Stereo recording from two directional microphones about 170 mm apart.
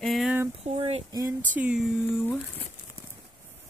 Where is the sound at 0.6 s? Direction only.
35° right (ahead or behind).